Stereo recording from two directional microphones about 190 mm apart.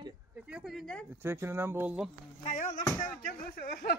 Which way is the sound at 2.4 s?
40° left (ahead or behind).